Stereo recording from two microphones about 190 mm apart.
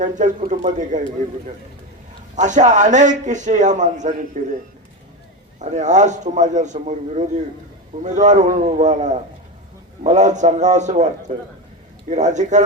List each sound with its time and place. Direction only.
0.0 s a man's voice: 40° right (ahead or behind)
2.3 s a man's voice: 40° right (ahead or behind)
5.5 s a man's voice: 40° right (ahead or behind)